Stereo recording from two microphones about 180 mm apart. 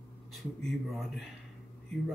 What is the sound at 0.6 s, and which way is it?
Speech, centre (ahead or behind).